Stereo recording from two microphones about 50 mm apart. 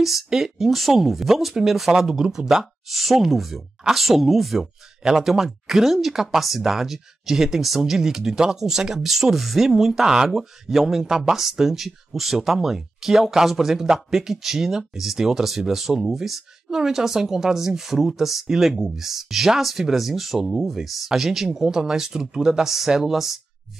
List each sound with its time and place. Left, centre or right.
0.0 s speech: centre